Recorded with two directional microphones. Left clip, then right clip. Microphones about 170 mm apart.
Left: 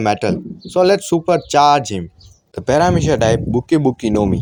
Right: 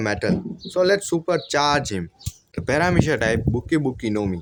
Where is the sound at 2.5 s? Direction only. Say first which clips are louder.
Left 6 dB; 25° left (ahead or behind).